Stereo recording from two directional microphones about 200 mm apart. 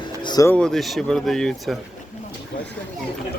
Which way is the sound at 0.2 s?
20° left (ahead or behind).